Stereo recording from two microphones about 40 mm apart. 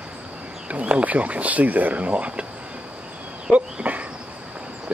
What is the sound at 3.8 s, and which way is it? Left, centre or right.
Insect, right.